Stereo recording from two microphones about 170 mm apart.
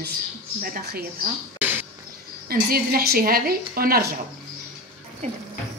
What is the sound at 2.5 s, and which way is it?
Speech, 60° right (ahead or behind).